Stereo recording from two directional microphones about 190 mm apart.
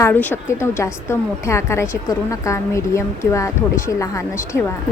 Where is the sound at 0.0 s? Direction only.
10° left (ahead or behind).